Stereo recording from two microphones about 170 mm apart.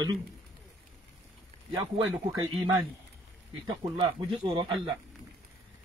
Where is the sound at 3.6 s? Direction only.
25° right (ahead or behind).